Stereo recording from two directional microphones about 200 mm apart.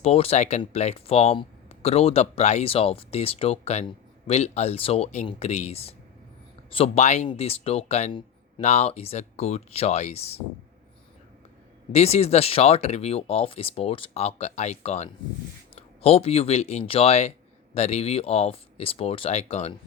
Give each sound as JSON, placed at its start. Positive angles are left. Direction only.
{"t": 0.0, "sound": "speech", "side_deg": 30}
{"t": 11.9, "sound": "speech", "side_deg": 30}